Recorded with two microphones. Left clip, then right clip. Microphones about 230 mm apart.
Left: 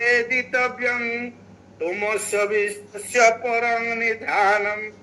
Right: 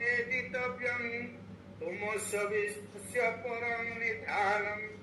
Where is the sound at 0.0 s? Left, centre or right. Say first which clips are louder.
Left 12 dB; left.